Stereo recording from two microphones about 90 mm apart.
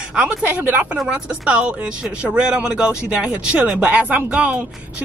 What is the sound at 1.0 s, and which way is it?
Speech, 10° right (ahead or behind).